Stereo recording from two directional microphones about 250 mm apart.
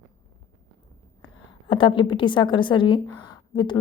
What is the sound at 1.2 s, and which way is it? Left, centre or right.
A woman's voice, centre.